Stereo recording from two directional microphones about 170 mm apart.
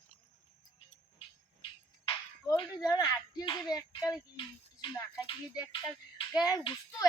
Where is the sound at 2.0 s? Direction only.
25° left (ahead or behind).